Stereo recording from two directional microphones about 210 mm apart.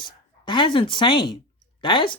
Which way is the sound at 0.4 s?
25° left (ahead or behind).